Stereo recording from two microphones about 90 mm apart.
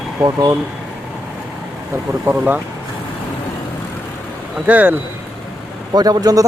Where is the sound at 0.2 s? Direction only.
40° right (ahead or behind).